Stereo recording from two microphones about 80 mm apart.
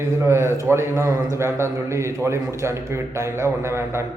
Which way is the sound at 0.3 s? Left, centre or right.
Right.